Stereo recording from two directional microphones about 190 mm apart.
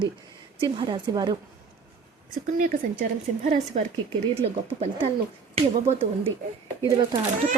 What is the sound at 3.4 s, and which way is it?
Speech, 35° right (ahead or behind).